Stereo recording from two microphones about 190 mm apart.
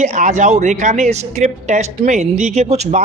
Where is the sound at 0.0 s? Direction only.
40° right (ahead or behind).